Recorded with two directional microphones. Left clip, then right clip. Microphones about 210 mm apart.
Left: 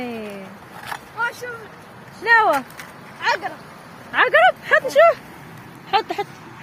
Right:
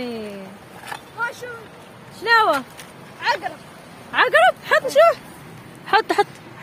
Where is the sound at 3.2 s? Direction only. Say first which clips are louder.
Left 1 dB; 10° left (ahead or behind).